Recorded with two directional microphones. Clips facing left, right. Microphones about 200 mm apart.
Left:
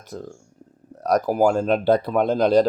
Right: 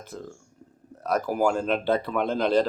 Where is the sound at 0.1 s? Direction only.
40° left (ahead or behind).